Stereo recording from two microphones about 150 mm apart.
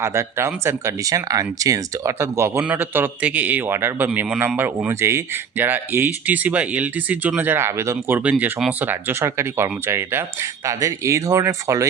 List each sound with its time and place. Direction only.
0.0 s speech: 20° right (ahead or behind)